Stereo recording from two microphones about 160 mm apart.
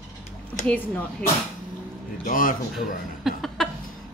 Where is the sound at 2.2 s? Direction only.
55° left (ahead or behind).